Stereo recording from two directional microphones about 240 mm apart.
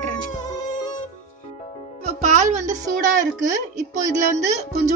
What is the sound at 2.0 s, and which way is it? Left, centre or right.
A child's voice, right.